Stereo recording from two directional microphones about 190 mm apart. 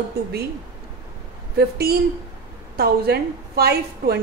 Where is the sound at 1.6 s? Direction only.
55° right (ahead or behind).